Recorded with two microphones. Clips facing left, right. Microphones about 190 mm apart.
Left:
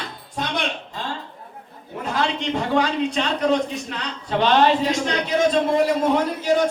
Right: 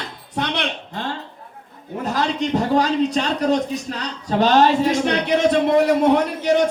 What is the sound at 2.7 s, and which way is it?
A man's voice, 40° right (ahead or behind).